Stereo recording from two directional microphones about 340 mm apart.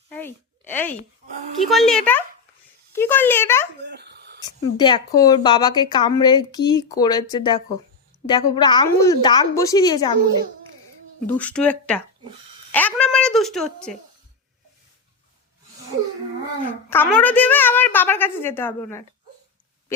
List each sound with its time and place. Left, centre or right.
0.1 s a sound: centre
1.6 s a woman's voice: centre
3.8 s dog: right
4.4 s speech: centre
11.3 s a woman's voice: centre
16.9 s a woman's voice: centre